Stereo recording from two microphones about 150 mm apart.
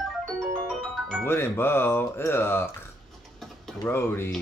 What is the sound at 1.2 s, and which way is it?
Speech, 15° left (ahead or behind).